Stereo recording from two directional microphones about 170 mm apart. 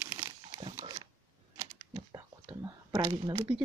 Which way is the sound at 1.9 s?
25° right (ahead or behind).